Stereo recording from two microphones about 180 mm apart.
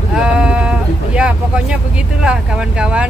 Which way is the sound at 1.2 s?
5° right (ahead or behind).